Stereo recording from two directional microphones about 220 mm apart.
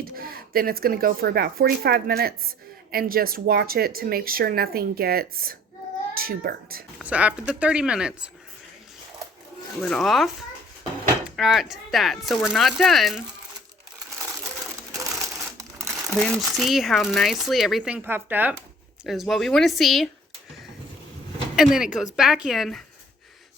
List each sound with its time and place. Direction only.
0.0 s speech: 40° right (ahead or behind)
7.0 s speech: 5° right (ahead or behind)
9.8 s speech: centre (ahead or behind)
11.3 s speech: centre (ahead or behind)
14.9 s crushing: 15° right (ahead or behind)
15.9 s speech: centre (ahead or behind)
21.5 s speech: centre (ahead or behind)